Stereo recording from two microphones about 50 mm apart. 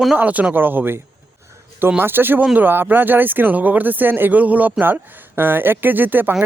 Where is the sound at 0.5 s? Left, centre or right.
Right.